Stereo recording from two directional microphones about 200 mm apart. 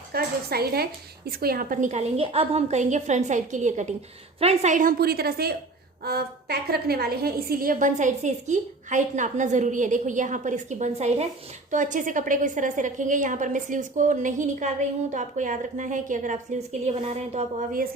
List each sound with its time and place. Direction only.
0.1 s a woman's voice: 50° right (ahead or behind)